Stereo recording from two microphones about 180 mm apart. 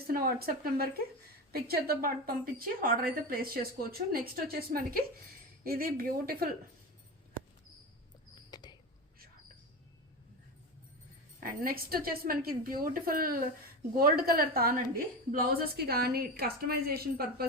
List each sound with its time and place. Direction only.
0.1 s a woman's voice: 55° right (ahead or behind)
8.4 s a sound: 25° left (ahead or behind)
11.4 s a woman's voice: 55° right (ahead or behind)